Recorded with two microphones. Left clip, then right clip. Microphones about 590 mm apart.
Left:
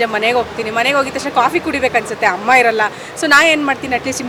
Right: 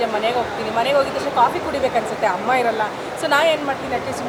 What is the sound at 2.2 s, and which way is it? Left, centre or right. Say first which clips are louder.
Speech: left 8 dB; left.